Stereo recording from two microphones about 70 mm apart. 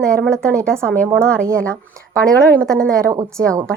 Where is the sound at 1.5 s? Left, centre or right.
Right.